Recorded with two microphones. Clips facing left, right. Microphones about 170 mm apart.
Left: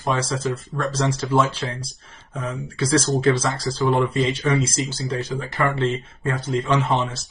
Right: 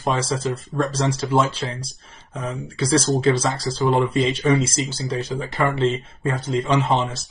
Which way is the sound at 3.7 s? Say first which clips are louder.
Even; 20° right (ahead or behind).